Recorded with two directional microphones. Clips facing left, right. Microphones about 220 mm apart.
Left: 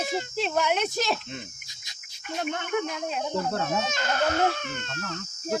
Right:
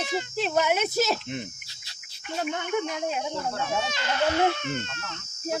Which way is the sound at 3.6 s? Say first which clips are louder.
Left 1 dB; 45° left (ahead or behind).